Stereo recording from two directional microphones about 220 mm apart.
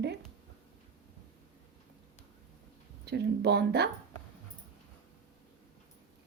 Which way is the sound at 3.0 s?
50° right (ahead or behind).